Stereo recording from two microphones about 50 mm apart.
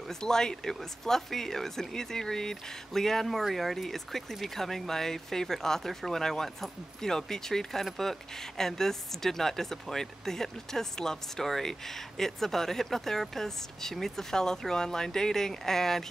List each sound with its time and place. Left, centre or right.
0.1 s speech: centre